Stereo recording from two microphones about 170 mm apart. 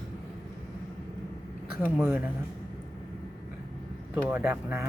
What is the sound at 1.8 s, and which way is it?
Speech, 5° right (ahead or behind).